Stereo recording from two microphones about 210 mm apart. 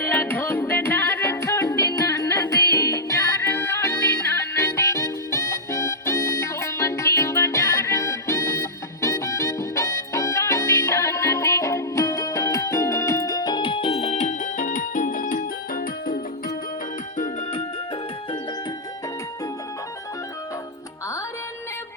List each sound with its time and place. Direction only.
0.0 s music: 10° left (ahead or behind); by 17.6 s 35° left (ahead or behind)